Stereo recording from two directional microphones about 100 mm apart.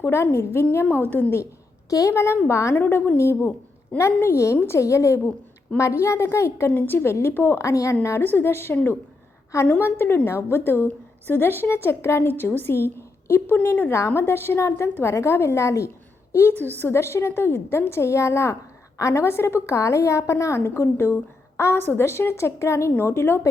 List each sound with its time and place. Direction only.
0.0 s a woman's voice: 25° left (ahead or behind)
1.9 s a woman's voice: 30° left (ahead or behind)